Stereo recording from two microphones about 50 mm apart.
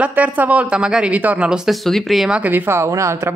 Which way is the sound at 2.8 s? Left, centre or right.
Right.